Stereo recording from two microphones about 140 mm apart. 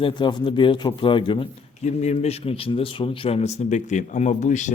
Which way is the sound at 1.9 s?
55° left (ahead or behind).